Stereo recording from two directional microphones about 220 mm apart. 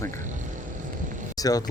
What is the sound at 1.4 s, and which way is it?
Speech, 15° left (ahead or behind).